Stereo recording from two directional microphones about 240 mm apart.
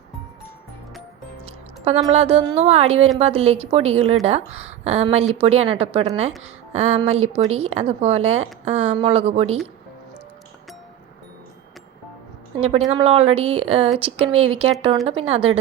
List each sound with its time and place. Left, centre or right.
1.5 s a woman's voice: right
12.5 s a woman's voice: right